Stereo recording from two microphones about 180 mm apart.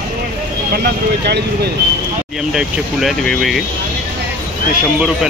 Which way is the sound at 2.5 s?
Centre (ahead or behind).